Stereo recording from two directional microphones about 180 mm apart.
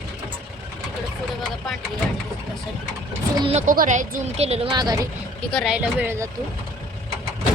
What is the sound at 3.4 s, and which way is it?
Speech, 35° right (ahead or behind).